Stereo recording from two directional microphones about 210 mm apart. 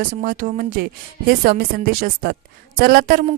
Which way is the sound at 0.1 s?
40° right (ahead or behind).